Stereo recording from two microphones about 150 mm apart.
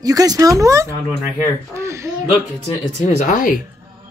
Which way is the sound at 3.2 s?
60° left (ahead or behind).